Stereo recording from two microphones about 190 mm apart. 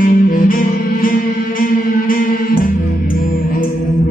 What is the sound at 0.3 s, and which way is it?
Music, 45° left (ahead or behind).